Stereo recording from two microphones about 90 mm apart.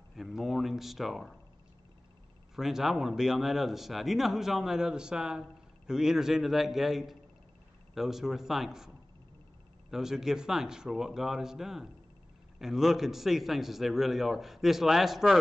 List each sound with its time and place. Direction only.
0.1 s speech: centre (ahead or behind)
2.5 s speech: 5° right (ahead or behind)